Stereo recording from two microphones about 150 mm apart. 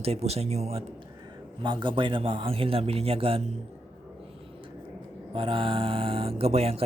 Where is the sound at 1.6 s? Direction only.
30° right (ahead or behind).